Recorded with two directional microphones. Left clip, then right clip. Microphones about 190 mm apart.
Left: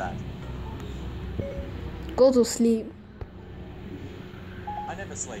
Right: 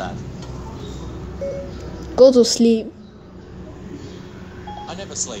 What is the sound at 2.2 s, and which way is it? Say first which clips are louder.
Speech: right 8 dB; 5° right (ahead or behind).